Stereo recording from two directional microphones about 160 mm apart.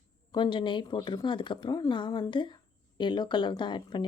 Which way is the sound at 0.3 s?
30° left (ahead or behind).